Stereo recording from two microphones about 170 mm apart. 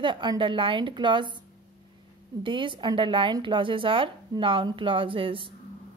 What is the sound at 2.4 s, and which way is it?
Speech, 30° right (ahead or behind).